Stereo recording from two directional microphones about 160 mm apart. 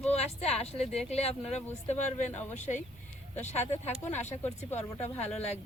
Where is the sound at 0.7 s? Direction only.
40° left (ahead or behind).